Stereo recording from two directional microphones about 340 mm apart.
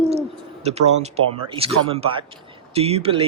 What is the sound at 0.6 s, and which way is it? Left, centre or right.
Speech, centre.